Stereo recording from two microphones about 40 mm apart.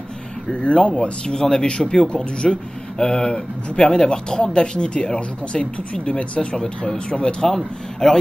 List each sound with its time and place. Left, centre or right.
0.5 s speech: left
7.4 s a man's voice: centre